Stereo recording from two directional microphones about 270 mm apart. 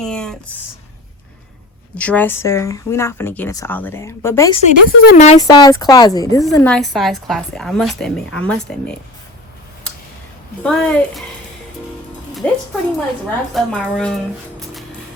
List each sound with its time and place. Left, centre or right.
0.0 s a sound: centre
2.0 s speech: centre
4.6 s speech: left
5.4 s a woman's voice: centre
10.6 s a woman's voice: centre
12.4 s a woman's voice: centre